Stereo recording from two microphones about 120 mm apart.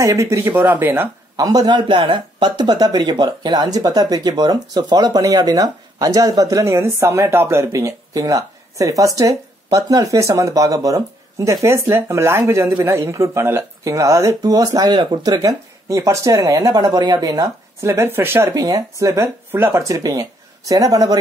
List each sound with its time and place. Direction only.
0.0 s speech: 25° right (ahead or behind)
1.3 s speech: 30° right (ahead or behind)
18.5 s speech: 30° right (ahead or behind)